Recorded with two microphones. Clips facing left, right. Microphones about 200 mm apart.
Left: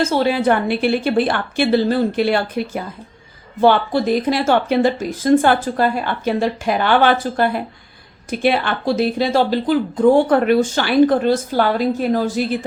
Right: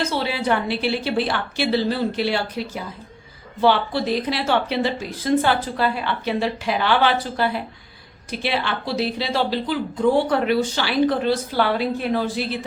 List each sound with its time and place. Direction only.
0.0 s a woman's voice: 45° left (ahead or behind)